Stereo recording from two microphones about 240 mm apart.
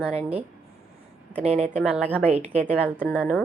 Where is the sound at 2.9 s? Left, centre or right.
Centre.